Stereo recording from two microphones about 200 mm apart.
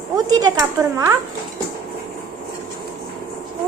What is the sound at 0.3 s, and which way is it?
Speech, 20° right (ahead or behind).